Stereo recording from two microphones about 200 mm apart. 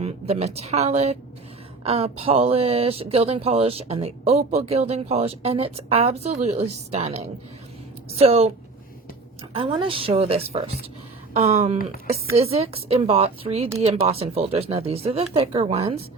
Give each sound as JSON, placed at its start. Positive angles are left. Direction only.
{"t": 0.0, "sound": "speech", "side_deg": -30}